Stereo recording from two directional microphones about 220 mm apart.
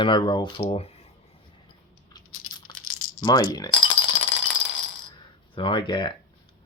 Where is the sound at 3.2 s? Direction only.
20° left (ahead or behind).